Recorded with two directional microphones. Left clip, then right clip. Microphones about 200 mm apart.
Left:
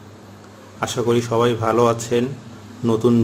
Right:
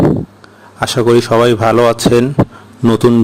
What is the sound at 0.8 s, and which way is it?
Speech, 50° right (ahead or behind).